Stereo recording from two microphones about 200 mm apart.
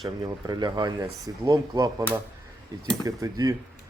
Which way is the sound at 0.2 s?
20° right (ahead or behind).